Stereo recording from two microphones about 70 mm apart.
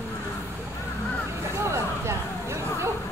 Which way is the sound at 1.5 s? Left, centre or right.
Right.